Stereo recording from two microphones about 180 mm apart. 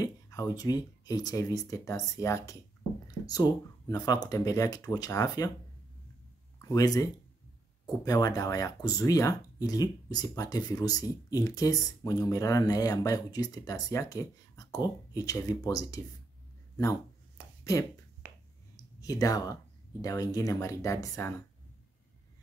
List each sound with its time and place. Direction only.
0.0 s speech: 20° left (ahead or behind)
6.6 s speech: 20° left (ahead or behind)
18.9 s speech: 20° left (ahead or behind)